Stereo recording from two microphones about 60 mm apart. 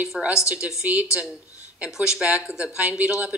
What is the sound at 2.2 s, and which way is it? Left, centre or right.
Speech, centre.